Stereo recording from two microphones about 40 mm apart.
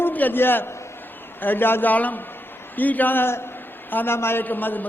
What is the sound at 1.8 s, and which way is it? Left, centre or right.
A man's voice, left.